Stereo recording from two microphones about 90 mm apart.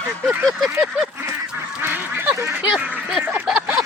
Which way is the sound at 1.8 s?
25° right (ahead or behind).